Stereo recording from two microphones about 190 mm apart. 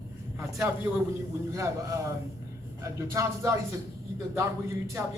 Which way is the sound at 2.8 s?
15° right (ahead or behind).